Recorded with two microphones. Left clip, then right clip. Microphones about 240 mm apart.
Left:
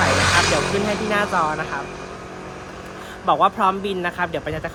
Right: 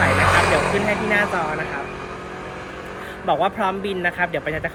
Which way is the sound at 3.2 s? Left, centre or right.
Centre.